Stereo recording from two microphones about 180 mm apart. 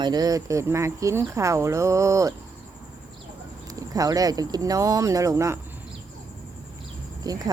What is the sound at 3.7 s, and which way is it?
Speech, 20° right (ahead or behind).